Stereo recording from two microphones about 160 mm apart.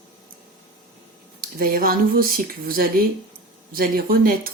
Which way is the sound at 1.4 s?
65° right (ahead or behind).